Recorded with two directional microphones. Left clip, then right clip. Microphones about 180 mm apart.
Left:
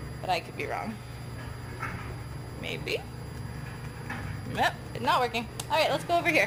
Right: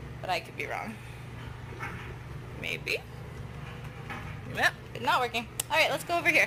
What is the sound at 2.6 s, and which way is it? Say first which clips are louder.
Speech: right 1 dB; 30° left (ahead or behind).